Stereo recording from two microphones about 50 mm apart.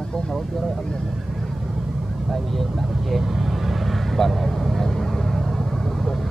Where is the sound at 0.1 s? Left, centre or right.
Centre.